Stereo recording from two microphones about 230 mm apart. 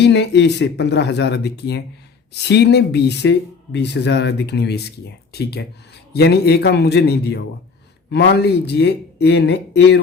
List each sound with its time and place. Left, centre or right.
0.0 s speech: left